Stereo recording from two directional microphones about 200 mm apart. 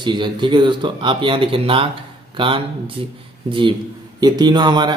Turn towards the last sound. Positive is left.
turn(degrees=-20)  # may be behind; listen again after turning